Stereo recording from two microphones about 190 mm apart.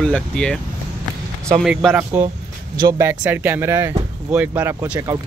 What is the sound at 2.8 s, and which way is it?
Speech, 20° right (ahead or behind).